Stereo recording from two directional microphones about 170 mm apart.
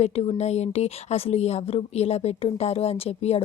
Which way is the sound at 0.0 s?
40° left (ahead or behind).